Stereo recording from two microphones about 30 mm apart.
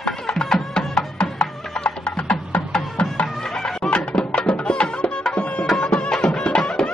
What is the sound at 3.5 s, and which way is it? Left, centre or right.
Music, centre.